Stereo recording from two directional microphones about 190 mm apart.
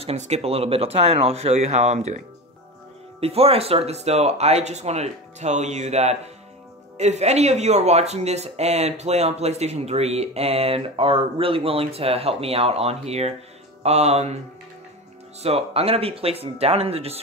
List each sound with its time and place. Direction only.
0.0 s speech: 35° right (ahead or behind)
15.4 s speech: 30° right (ahead or behind)